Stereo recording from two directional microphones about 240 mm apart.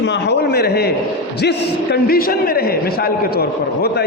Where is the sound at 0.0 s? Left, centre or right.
Left.